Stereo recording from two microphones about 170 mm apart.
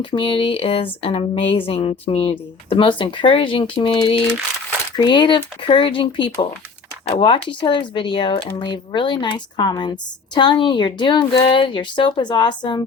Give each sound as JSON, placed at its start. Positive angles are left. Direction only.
{"t": 0.0, "sound": "a woman's voice", "side_deg": 30}